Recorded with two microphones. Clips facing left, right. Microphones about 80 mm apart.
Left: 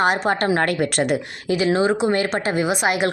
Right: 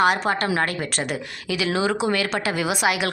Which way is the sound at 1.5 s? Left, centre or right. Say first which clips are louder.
Left 4 dB; left.